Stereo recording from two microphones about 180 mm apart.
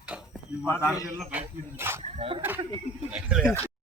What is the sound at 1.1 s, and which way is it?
Speech, 10° right (ahead or behind).